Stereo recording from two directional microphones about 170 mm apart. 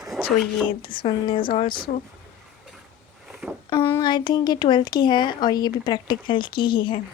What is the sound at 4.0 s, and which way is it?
Speech, 25° left (ahead or behind).